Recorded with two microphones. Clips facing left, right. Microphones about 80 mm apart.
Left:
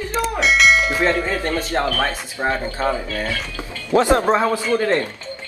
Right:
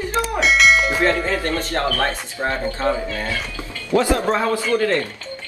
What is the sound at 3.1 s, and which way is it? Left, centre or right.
Speech, right.